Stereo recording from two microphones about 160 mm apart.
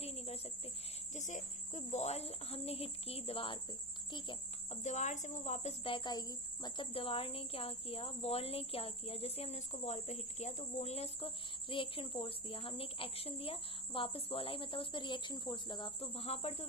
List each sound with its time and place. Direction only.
0.0 s cricket: 40° left (ahead or behind)
1.1 s speech: 50° left (ahead or behind); by 4.4 s 30° left (ahead or behind)
4.7 s speech: 45° left (ahead or behind)